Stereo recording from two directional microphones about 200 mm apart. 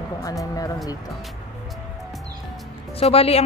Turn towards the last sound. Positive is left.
turn(degrees=30)  # may be behind; listen again after turning